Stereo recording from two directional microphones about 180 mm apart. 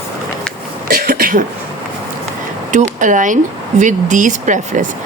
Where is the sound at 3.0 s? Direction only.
45° right (ahead or behind).